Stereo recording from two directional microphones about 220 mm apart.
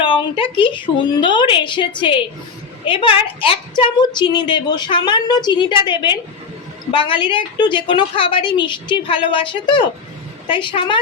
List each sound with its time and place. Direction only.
0.0 s a woman's voice: 25° left (ahead or behind)